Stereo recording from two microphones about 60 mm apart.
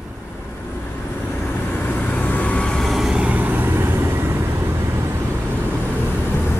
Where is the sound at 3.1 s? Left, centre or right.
Right.